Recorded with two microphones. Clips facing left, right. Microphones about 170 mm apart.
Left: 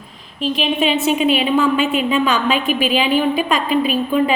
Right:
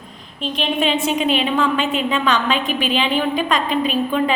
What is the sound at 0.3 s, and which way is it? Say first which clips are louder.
A woman's voice: left 3 dB; 5° left (ahead or behind).